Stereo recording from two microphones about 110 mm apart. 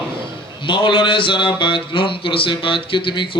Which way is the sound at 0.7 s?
50° left (ahead or behind).